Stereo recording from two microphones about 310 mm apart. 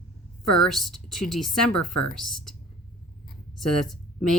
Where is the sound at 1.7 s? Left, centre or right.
Left.